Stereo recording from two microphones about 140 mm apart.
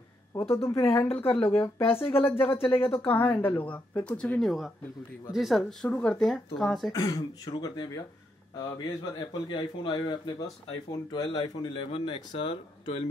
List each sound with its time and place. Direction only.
0.3 s speech: 20° left (ahead or behind)
1.8 s speech: 40° left (ahead or behind)
2.2 s speech: 15° left (ahead or behind)
2.7 s speech: 40° left (ahead or behind)
3.1 s speech: 15° left (ahead or behind)
6.9 s speech: 25° left (ahead or behind); by 13.0 s 45° left (ahead or behind)